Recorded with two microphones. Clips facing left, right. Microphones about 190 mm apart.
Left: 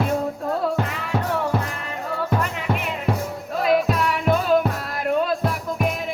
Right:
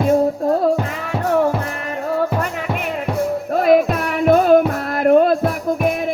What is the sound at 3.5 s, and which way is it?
Music, 50° right (ahead or behind).